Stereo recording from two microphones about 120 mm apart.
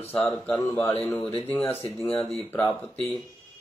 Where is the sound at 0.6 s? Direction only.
40° left (ahead or behind).